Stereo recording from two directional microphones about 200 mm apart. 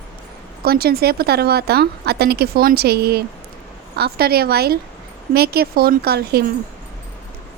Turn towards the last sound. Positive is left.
turn(degrees=-50)  # may be behind; listen again after turning